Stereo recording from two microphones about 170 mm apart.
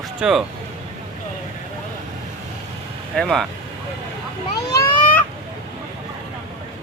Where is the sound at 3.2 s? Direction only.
Centre (ahead or behind).